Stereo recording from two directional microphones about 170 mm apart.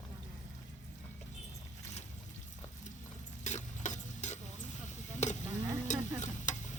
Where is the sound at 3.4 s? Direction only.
45° left (ahead or behind).